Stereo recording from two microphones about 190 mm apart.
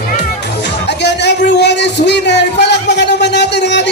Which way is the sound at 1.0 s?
65° left (ahead or behind).